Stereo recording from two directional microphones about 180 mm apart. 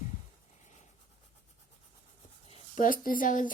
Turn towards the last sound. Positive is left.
turn(degrees=45)  # may be behind; listen again after turning